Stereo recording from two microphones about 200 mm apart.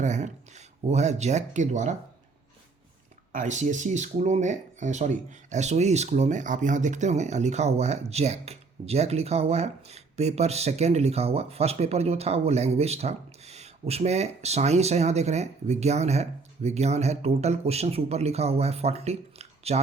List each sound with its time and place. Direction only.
0.0 s speech: 35° right (ahead or behind)
3.3 s speech: 35° right (ahead or behind)